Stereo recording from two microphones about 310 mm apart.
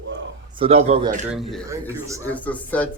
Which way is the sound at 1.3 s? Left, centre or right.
Centre.